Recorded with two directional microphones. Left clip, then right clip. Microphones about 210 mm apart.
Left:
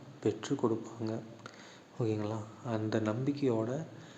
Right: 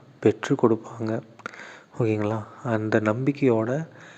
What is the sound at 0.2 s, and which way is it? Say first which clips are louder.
Speech: right 12 dB; 35° right (ahead or behind).